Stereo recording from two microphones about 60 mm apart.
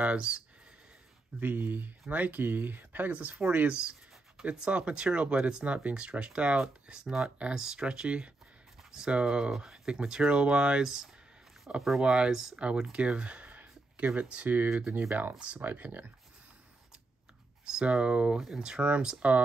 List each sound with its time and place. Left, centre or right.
0.0 s speech: centre
1.4 s speech: right; by 12.5 s centre
12.5 s speech: centre
17.6 s speech: centre